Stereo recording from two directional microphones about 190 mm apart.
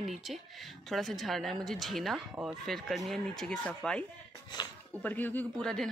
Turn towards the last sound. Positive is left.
turn(degrees=5)  # may be behind; listen again after turning